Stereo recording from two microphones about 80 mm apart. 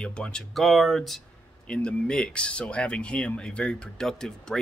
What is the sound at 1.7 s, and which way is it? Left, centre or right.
Speech, centre.